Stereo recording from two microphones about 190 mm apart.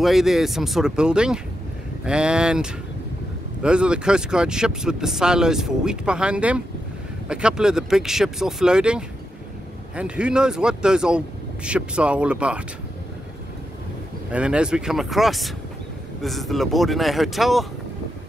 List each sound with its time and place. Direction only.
0.0 s speech: centre (ahead or behind)
14.3 s speech: 5° right (ahead or behind)